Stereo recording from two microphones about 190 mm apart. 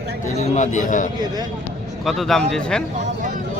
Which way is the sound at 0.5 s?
40° left (ahead or behind).